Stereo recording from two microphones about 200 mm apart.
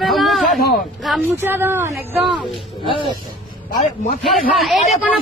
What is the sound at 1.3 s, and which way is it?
Speech, 10° right (ahead or behind).